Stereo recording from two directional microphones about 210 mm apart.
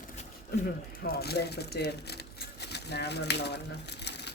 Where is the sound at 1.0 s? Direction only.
50° left (ahead or behind).